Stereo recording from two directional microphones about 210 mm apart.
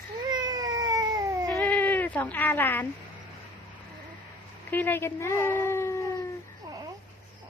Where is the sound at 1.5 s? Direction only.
10° left (ahead or behind).